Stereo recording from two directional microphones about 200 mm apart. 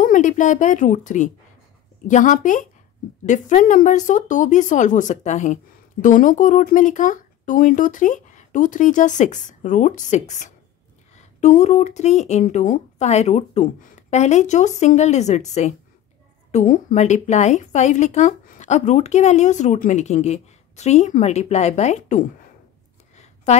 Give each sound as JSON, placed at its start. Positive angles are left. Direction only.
{"t": 0.0, "sound": "speech", "side_deg": 40}